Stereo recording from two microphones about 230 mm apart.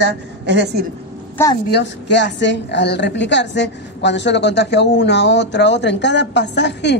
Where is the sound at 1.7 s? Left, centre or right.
Left.